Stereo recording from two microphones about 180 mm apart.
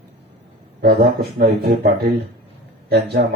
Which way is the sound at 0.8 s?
60° right (ahead or behind).